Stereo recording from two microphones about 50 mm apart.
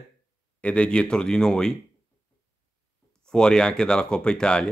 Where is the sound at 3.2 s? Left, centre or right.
Centre.